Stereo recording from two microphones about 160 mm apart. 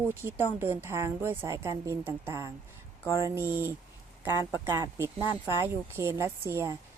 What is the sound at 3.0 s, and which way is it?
Speech, 20° left (ahead or behind).